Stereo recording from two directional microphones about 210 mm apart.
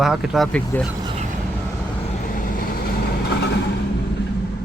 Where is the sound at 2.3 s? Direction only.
45° left (ahead or behind).